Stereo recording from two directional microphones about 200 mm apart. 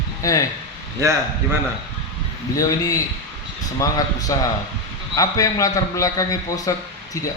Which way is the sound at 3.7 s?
15° left (ahead or behind).